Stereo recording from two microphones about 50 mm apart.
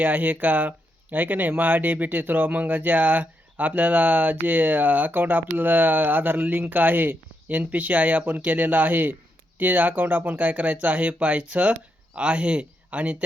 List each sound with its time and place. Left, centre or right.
0.0 s speech: right